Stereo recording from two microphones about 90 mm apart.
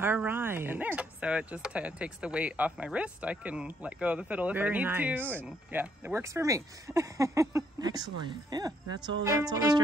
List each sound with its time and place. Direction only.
0.0 s speech: 25° right (ahead or behind)
6.2 s speech: 35° right (ahead or behind)
7.8 s speech: 50° right (ahead or behind)